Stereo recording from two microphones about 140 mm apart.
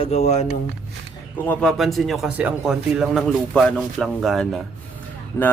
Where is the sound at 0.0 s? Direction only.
50° left (ahead or behind).